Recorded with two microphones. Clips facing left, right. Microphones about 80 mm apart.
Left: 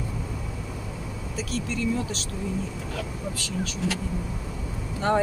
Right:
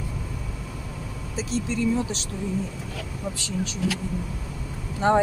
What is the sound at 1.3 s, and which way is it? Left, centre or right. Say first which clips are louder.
Speech: right 3 dB; right.